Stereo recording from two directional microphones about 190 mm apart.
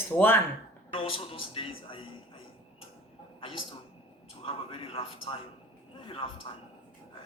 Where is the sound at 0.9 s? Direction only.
30° left (ahead or behind).